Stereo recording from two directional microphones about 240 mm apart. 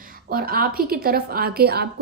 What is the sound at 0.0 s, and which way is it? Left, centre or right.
A woman's voice, right.